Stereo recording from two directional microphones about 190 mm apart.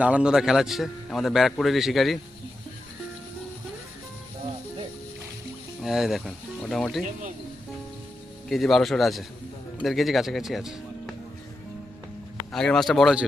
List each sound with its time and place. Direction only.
0.0 s a man's voice: 5° right (ahead or behind)
5.8 s speech: centre (ahead or behind)
8.4 s a man's voice: centre (ahead or behind)
12.5 s a man's voice: 5° left (ahead or behind)